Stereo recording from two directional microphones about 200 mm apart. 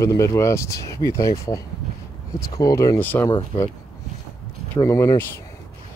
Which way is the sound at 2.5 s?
20° left (ahead or behind).